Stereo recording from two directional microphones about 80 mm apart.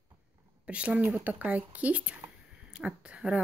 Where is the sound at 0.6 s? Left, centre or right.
Centre.